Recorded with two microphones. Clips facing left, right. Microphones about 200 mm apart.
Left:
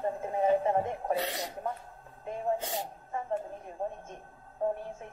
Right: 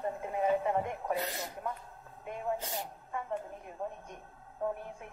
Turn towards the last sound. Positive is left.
turn(degrees=30)  # may be behind; listen again after turning